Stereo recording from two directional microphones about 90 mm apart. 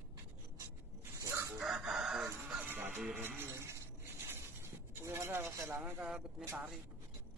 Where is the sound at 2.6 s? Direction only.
25° right (ahead or behind).